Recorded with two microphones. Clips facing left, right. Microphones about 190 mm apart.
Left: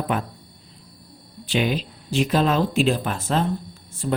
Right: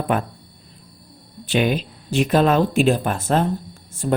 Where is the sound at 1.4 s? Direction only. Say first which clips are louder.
Right 3 dB; 55° right (ahead or behind).